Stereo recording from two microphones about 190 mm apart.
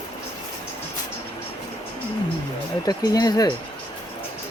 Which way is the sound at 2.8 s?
20° left (ahead or behind).